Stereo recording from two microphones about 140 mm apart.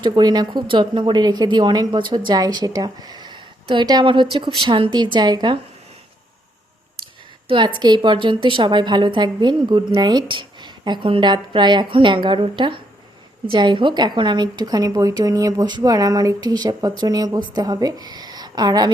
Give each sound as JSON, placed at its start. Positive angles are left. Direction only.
{"t": 0.0, "sound": "speech", "side_deg": -30}
{"t": 7.0, "sound": "speech", "side_deg": -35}